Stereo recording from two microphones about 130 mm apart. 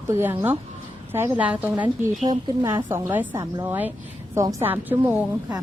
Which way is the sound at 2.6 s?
30° right (ahead or behind).